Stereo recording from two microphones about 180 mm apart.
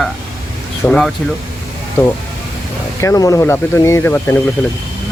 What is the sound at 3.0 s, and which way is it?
Speech, 20° left (ahead or behind).